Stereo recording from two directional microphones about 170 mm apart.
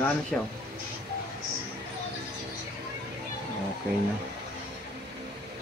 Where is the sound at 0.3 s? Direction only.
5° left (ahead or behind).